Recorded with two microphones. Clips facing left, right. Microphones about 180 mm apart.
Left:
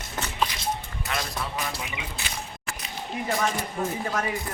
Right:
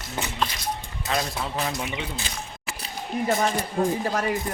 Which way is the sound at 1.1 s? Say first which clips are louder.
Right 5 dB; 30° right (ahead or behind).